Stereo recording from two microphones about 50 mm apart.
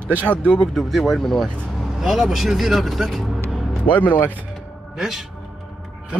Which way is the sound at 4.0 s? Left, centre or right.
Left.